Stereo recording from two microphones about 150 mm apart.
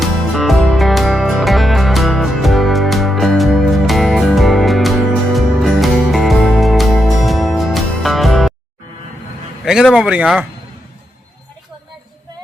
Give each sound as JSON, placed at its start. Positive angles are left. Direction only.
{"t": 0.0, "sound": "music", "side_deg": 0}
{"t": 9.6, "sound": "speech", "side_deg": 0}